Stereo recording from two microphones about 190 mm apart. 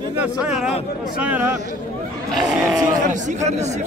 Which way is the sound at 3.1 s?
40° right (ahead or behind).